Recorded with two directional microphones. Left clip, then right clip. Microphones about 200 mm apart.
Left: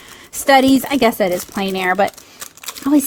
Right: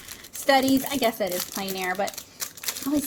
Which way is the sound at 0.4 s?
35° left (ahead or behind).